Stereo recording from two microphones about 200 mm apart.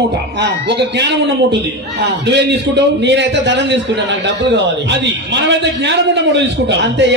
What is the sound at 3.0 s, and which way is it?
A man's voice, 60° right (ahead or behind).